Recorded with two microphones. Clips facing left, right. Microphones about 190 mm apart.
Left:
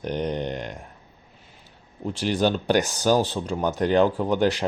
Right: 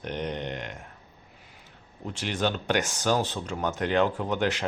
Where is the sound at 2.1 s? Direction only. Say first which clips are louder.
Left 6 dB; 35° left (ahead or behind).